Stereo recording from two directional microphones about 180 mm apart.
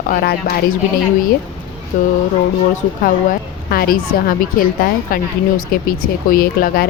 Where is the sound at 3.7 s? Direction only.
55° left (ahead or behind).